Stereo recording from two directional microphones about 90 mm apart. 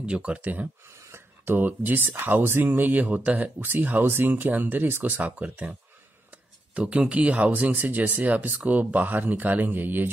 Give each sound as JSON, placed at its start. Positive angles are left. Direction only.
{"t": 0.0, "sound": "speech", "side_deg": -15}
{"t": 0.8, "sound": "speech", "side_deg": -30}